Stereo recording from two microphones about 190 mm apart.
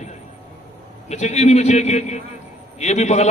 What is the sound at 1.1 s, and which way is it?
A man's voice, 35° left (ahead or behind).